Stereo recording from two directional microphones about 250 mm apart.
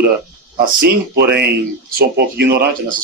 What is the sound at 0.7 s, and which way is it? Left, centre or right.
Speech, right.